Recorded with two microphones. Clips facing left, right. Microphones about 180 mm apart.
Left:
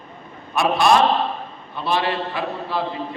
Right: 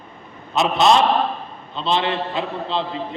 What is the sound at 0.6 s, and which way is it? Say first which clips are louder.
A man's voice: even; 20° right (ahead or behind).